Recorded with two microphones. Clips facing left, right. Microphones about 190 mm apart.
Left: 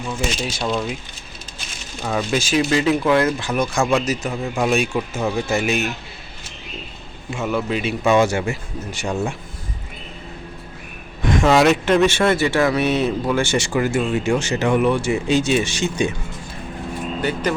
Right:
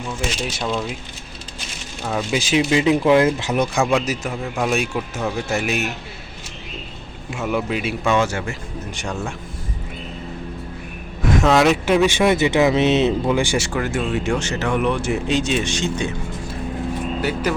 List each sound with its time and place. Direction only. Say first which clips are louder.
0.6 s speech: left 2 dB; 5° left (ahead or behind)
2.0 s speech: left 1 dB; centre (ahead or behind)
2.4 s speech: right 3 dB; 15° right (ahead or behind)
3.9 s a man's voice: left 1 dB; 5° right (ahead or behind)
7.3 s speech: even; 5° right (ahead or behind)
8.0 s speech: left 4 dB; 10° left (ahead or behind)
11.2 s speech: left 1 dB; 5° right (ahead or behind)
12.0 s speech: right 1 dB; 15° right (ahead or behind)
13.6 s speech: left 3 dB; centre (ahead or behind)
17.2 s speech: left 2 dB; 5° right (ahead or behind)